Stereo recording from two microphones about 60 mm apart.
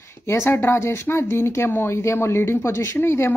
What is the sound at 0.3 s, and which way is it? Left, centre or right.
A woman's voice, left.